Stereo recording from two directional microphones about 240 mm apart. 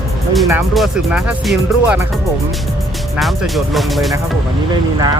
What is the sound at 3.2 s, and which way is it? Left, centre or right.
Speech, centre.